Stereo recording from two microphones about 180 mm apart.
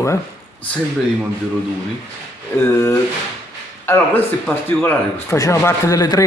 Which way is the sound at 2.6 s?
15° left (ahead or behind).